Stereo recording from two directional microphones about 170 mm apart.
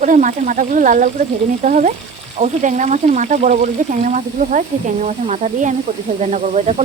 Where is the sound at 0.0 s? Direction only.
50° right (ahead or behind).